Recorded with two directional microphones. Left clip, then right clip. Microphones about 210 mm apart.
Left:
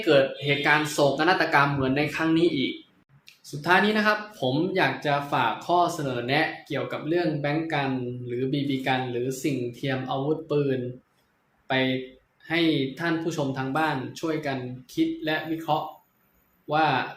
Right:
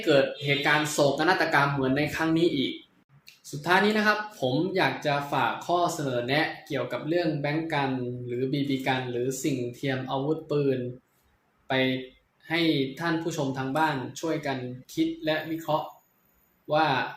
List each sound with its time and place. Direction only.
0.0 s speech: 5° left (ahead or behind)
12.5 s speech: 5° left (ahead or behind)